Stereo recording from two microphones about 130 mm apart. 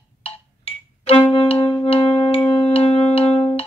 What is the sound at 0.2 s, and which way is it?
Music, 50° left (ahead or behind).